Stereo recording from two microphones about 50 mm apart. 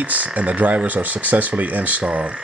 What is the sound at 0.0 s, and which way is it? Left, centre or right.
Speech, right.